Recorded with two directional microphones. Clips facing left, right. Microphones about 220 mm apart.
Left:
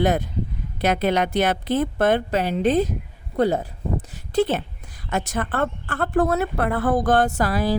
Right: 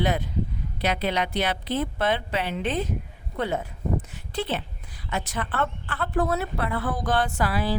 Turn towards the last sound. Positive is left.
turn(degrees=40)  # may be behind; listen again after turning